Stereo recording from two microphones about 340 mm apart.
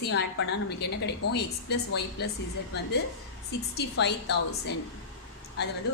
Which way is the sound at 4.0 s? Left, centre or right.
Left.